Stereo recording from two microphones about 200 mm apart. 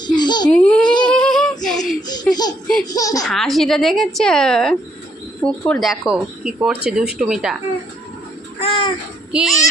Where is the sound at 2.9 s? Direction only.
15° left (ahead or behind).